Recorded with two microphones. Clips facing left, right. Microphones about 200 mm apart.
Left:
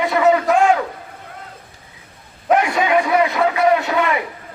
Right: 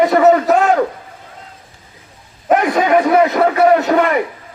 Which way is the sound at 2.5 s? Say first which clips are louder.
Right 3 dB; 45° right (ahead or behind).